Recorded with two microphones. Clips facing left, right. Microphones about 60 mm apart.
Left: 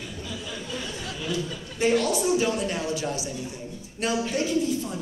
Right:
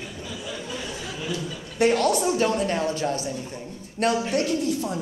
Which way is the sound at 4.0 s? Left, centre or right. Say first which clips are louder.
Right 3 dB; right.